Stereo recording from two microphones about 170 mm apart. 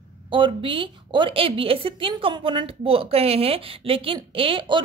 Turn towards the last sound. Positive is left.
turn(degrees=-30)  # may be behind; listen again after turning